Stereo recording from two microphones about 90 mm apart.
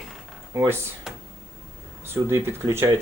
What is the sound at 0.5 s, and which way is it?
Speech, 35° right (ahead or behind).